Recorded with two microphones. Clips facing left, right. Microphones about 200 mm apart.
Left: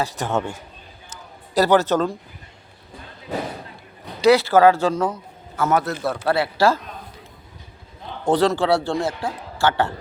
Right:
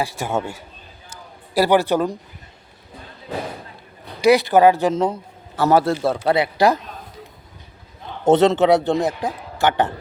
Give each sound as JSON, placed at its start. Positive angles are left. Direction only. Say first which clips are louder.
{"t": 0.0, "sound": "speech", "louder": "even", "side_deg": -10}
{"t": 1.1, "sound": "a sound", "louder": "even", "side_deg": -10}
{"t": 4.2, "sound": "a man's voice", "louder": "right 1 dB", "side_deg": -15}
{"t": 8.2, "sound": "a man's voice", "louder": "right 4 dB", "side_deg": -25}